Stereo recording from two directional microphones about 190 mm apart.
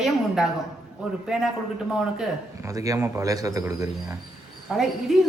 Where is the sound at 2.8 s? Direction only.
15° right (ahead or behind).